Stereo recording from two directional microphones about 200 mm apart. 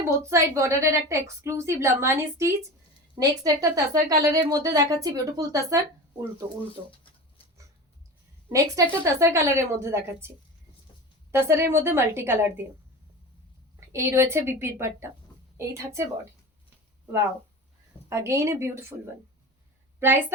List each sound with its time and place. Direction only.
0.2 s a woman's voice: 15° right (ahead or behind)
8.4 s a woman's voice: 15° right (ahead or behind)
11.3 s a woman's voice: 15° right (ahead or behind)
13.7 s a woman's voice: 15° right (ahead or behind)
16.6 s a sound: 15° right (ahead or behind)
18.1 s a woman's voice: 15° right (ahead or behind)
20.0 s a woman's voice: 10° right (ahead or behind)